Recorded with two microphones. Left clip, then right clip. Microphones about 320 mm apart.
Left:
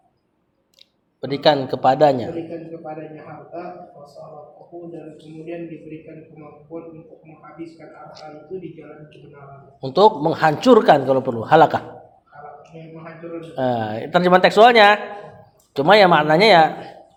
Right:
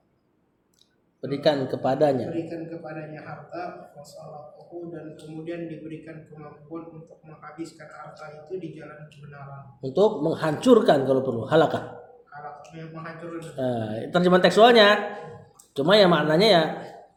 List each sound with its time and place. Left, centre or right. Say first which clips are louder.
1.2 s a man's voice: left 6 dB; centre
9.8 s a man's voice: left 7 dB; left
13.6 s a man's voice: left 7 dB; centre